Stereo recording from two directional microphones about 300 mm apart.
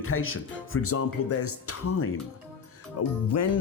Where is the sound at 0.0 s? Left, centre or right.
Left.